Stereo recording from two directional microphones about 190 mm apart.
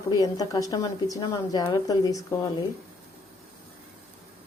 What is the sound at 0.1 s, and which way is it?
A woman's voice, 20° left (ahead or behind).